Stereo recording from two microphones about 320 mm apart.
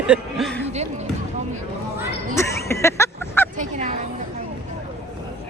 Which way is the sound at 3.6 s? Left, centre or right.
Right.